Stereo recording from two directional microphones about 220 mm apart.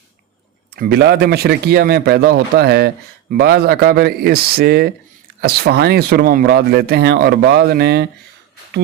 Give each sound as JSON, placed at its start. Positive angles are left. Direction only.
{"t": 0.8, "sound": "speech", "side_deg": -50}